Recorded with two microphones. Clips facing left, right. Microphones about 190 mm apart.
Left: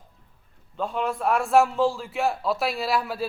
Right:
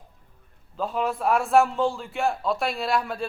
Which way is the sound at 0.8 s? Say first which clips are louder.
Right 1 dB; centre (ahead or behind).